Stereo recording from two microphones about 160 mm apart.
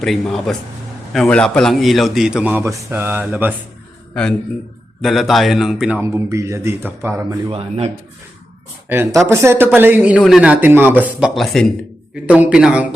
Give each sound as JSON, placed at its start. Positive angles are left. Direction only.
{"t": 0.0, "sound": "a man's voice", "side_deg": 0}
{"t": 4.1, "sound": "a man's voice", "side_deg": 5}
{"t": 6.0, "sound": "speech", "side_deg": -15}
{"t": 7.3, "sound": "speech", "side_deg": -35}
{"t": 9.2, "sound": "speech", "side_deg": -15}
{"t": 11.3, "sound": "a man's voice", "side_deg": 0}